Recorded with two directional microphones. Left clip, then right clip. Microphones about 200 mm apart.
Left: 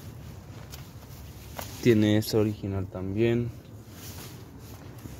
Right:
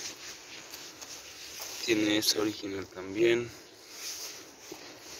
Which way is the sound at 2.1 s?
10° left (ahead or behind).